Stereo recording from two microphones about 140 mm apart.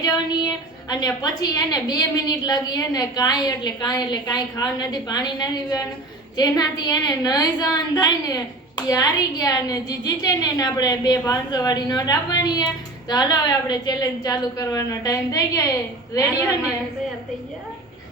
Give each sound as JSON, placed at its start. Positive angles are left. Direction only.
{"t": 0.0, "sound": "a woman's voice", "side_deg": 30}